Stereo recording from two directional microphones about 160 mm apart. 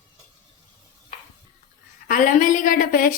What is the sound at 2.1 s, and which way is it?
A woman's voice, 55° left (ahead or behind).